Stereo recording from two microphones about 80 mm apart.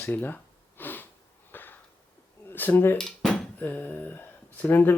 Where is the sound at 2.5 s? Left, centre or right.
Left.